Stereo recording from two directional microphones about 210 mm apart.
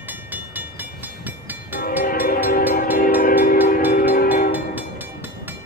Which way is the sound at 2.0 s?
45° left (ahead or behind).